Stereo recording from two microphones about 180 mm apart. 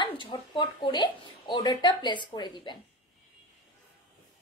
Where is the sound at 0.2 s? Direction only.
25° left (ahead or behind).